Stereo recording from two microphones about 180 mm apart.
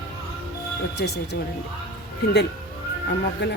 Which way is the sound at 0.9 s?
65° left (ahead or behind).